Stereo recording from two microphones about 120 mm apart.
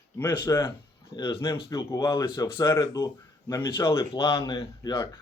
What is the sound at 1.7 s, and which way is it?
Speech, 30° left (ahead or behind).